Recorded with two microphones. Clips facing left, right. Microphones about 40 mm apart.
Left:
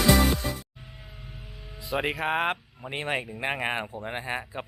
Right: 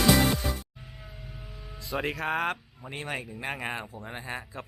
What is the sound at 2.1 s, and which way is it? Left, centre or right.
Speech, left.